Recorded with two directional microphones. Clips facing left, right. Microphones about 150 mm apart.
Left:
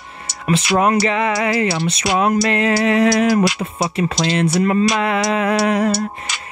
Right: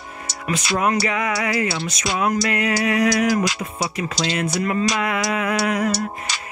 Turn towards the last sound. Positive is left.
turn(degrees=30)  # may be behind; listen again after turning